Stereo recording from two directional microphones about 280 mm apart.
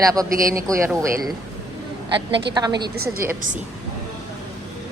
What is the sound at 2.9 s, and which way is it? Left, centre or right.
Speech, right.